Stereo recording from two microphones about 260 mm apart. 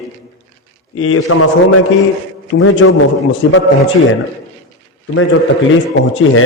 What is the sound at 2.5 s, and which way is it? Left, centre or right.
Speech, left.